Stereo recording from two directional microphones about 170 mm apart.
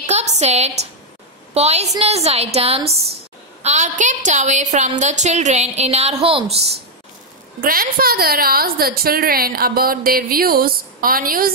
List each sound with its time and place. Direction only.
0.0 s a sound: 40° right (ahead or behind)
1.5 s a woman's voice: 40° right (ahead or behind)
7.6 s a woman's voice: 55° right (ahead or behind)